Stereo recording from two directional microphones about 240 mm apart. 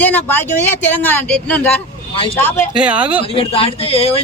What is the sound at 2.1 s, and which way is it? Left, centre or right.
Speech, left.